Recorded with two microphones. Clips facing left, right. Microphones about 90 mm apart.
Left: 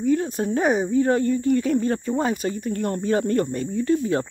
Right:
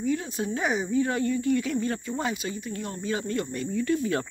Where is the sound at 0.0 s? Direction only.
45° left (ahead or behind).